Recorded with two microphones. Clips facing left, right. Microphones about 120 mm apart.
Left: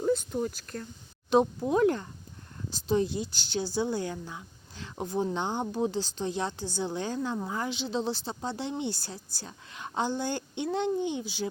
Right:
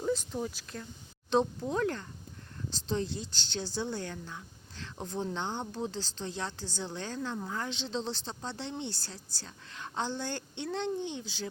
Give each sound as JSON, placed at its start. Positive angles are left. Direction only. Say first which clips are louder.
{"t": 0.1, "sound": "speech", "louder": "left 4 dB", "side_deg": 0}
{"t": 1.3, "sound": "speech", "louder": "left 5 dB", "side_deg": 15}